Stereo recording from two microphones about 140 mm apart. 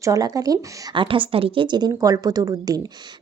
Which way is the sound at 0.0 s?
25° right (ahead or behind).